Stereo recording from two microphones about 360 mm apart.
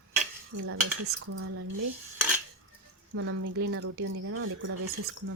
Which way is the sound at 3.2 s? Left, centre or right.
Right.